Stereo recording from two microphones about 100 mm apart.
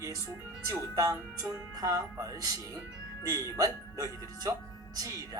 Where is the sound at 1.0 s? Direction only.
35° right (ahead or behind).